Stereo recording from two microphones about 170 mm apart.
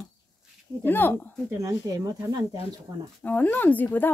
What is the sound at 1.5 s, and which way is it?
Speech, 20° right (ahead or behind).